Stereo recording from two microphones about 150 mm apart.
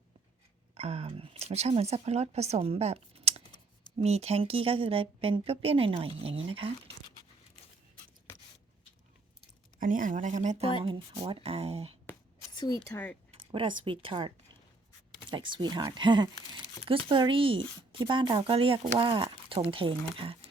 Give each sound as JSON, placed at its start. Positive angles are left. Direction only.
{"t": 0.7, "sound": "speech", "side_deg": -45}
{"t": 9.8, "sound": "speech", "side_deg": -60}
{"t": 12.5, "sound": "a woman's voice", "side_deg": 25}
{"t": 13.5, "sound": "speech", "side_deg": -35}